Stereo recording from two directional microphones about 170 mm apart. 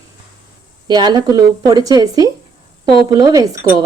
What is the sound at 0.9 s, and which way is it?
A woman's voice, 25° right (ahead or behind).